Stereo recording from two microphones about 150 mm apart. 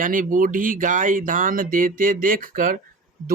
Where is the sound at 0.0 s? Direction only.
65° right (ahead or behind).